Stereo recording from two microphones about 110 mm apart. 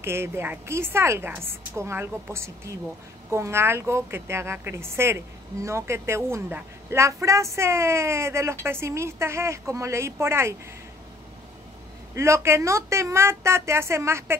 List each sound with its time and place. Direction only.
0.0 s a woman's voice: 20° right (ahead or behind)
12.2 s a woman's voice: 25° right (ahead or behind)